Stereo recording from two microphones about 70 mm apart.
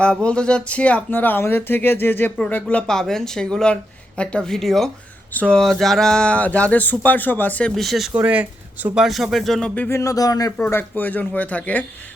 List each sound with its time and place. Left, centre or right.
0.0 s speech: centre
2.6 s speech: centre
5.3 s speech: left
5.5 s speech: centre; by 7.7 s left
7.8 s speech: centre
8.1 s speech: right
9.0 s speech: centre
9.9 s speech: left
10.7 s speech: left